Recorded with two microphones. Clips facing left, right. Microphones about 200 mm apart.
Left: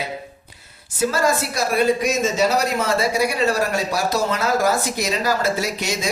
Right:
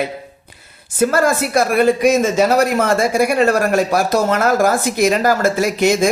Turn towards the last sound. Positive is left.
turn(degrees=-55)  # may be behind; listen again after turning